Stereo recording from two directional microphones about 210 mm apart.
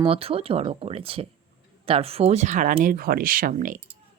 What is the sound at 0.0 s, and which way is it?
Speech, 25° right (ahead or behind).